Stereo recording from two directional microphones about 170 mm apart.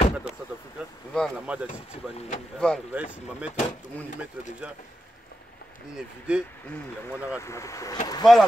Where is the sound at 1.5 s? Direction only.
5° right (ahead or behind).